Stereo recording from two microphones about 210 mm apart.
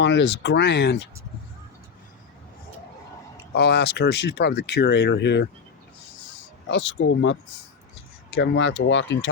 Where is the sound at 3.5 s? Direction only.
50° left (ahead or behind).